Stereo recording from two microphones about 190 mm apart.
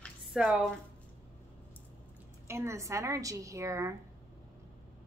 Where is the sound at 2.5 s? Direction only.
15° right (ahead or behind).